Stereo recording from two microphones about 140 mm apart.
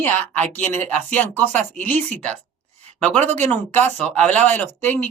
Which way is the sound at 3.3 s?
10° left (ahead or behind).